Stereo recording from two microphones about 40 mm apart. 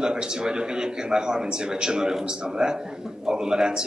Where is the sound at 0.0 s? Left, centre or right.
Centre.